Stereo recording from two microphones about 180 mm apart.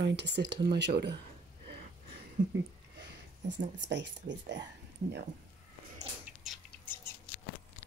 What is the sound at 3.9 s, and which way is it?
Speech, 75° right (ahead or behind).